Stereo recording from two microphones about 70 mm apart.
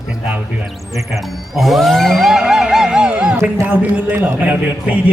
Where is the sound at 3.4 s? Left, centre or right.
Right.